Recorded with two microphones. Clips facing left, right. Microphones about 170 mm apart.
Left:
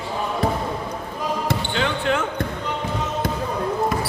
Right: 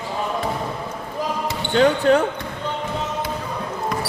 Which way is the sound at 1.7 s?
40° right (ahead or behind).